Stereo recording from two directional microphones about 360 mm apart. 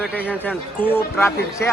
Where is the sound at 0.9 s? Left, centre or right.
Centre.